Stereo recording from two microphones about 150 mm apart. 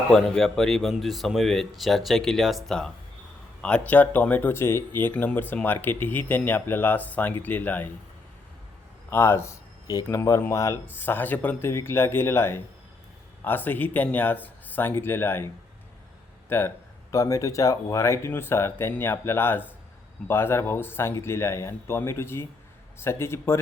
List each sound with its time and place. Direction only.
0.1 s speech: 5° left (ahead or behind)
9.0 s speech: 15° left (ahead or behind)
16.5 s speech: 15° left (ahead or behind)